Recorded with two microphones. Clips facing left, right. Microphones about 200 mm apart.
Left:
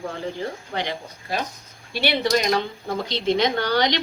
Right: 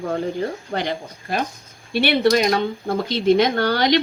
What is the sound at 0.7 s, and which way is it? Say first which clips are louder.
Speech: right 4 dB; 45° right (ahead or behind).